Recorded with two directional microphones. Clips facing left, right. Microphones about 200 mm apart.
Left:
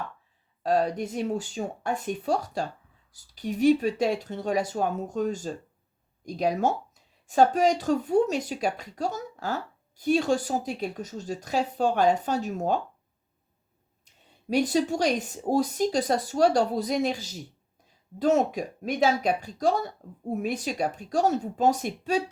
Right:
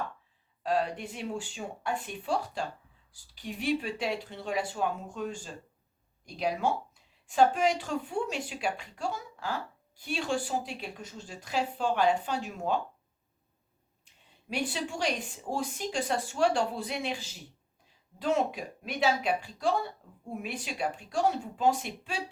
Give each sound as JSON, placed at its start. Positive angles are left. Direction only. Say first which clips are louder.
{"t": 0.6, "sound": "speech", "louder": "left 5 dB", "side_deg": 40}
{"t": 14.5, "sound": "speech", "louder": "left 10 dB", "side_deg": 40}